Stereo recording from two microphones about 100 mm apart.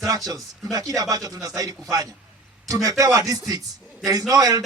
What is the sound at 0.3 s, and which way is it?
A man's voice, 35° right (ahead or behind).